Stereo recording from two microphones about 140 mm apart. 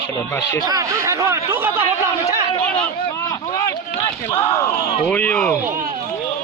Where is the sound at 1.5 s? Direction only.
15° right (ahead or behind).